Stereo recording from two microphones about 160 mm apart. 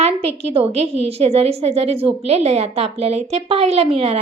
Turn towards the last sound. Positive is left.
turn(degrees=-35)  # may be behind; listen again after turning